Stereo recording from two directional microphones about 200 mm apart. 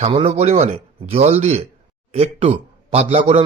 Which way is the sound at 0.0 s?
30° right (ahead or behind).